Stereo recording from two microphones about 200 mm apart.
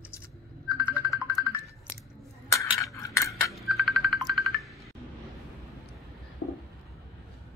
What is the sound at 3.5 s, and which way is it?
Music, centre (ahead or behind).